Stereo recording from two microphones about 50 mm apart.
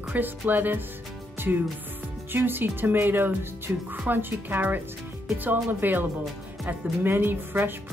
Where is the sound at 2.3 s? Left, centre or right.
Right.